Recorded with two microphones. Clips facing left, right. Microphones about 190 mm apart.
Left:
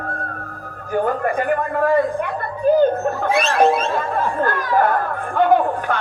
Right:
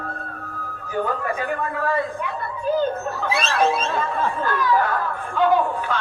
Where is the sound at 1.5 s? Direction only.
55° left (ahead or behind).